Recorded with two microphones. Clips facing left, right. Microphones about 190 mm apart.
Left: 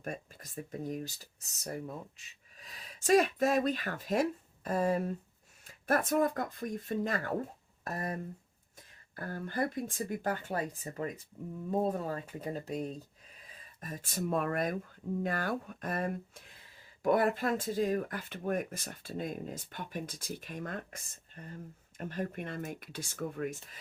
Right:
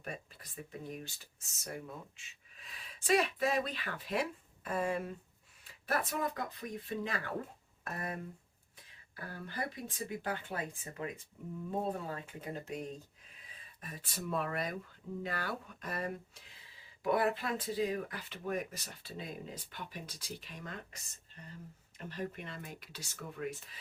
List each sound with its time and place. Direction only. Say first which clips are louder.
0.0 s speech: left 4 dB; 45° left (ahead or behind)
9.1 s speech: left 7 dB; 50° left (ahead or behind)